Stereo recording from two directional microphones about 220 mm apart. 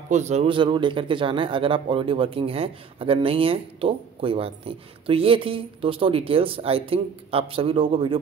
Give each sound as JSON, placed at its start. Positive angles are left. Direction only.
{"t": 0.1, "sound": "a man's voice", "side_deg": -30}